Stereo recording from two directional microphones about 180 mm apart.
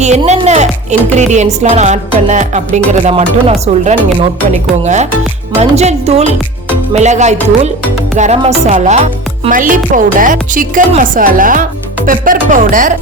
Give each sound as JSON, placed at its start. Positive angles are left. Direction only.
{"t": 0.3, "sound": "speech", "side_deg": -40}